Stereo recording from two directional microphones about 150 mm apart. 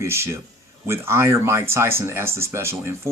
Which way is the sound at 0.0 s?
20° right (ahead or behind).